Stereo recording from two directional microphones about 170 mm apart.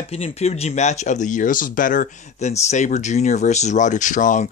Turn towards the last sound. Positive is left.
turn(degrees=45)  # may be behind; listen again after turning